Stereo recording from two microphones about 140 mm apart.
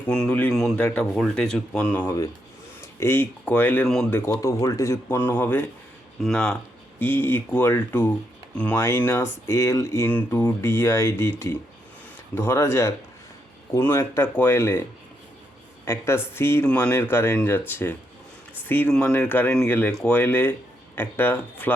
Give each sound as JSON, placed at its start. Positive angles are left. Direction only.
{"t": 0.1, "sound": "speech", "side_deg": 10}
{"t": 6.2, "sound": "speech", "side_deg": 5}
{"t": 7.0, "sound": "speech", "side_deg": 15}
{"t": 15.9, "sound": "speech", "side_deg": 15}